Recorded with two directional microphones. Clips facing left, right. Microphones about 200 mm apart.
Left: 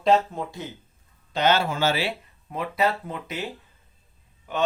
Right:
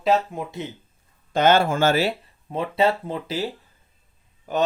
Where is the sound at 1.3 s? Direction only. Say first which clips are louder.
Right 4 dB; 50° right (ahead or behind).